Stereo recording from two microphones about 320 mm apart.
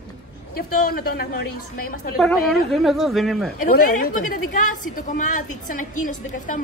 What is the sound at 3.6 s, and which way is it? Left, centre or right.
A woman's voice, left.